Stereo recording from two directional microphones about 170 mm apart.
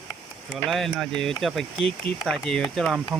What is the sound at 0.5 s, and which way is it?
Speech, centre (ahead or behind).